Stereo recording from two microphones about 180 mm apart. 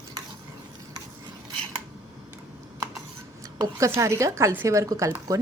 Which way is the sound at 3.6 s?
15° right (ahead or behind).